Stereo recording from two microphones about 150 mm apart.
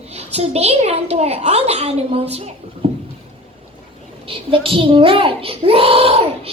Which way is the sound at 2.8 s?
40° right (ahead or behind).